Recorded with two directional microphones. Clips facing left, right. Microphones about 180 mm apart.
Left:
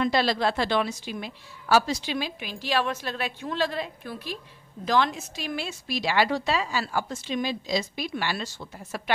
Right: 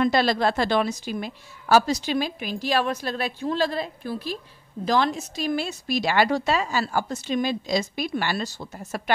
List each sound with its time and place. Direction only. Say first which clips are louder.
0.0 s a woman's voice: right 3 dB; 45° right (ahead or behind)